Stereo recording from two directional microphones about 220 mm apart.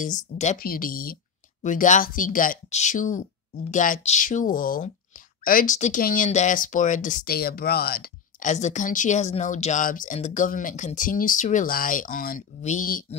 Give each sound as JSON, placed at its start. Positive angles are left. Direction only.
{"t": 0.0, "sound": "speech", "side_deg": 35}